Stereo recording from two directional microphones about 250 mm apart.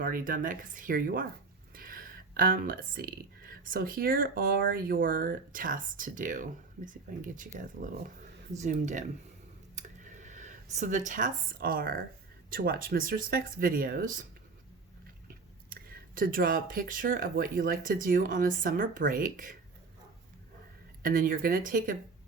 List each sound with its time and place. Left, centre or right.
0.0 s speech: right
9.7 s a sound: right
12.5 s speech: right
15.3 s speech: right
21.0 s speech: right